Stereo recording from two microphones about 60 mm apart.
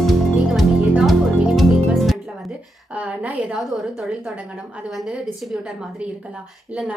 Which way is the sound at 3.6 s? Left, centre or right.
Centre.